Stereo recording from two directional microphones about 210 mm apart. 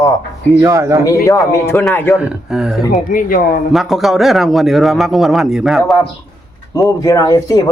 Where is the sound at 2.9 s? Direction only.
40° left (ahead or behind).